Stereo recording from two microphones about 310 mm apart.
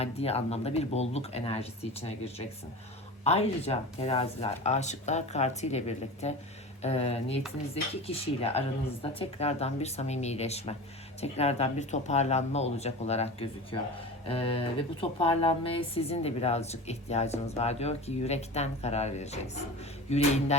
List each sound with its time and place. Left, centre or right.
0.0 s a woman's voice: centre